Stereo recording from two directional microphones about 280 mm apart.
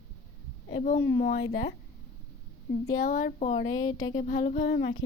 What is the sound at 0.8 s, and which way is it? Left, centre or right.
Speech, left.